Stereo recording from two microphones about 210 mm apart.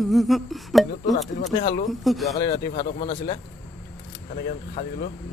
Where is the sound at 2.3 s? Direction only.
35° left (ahead or behind).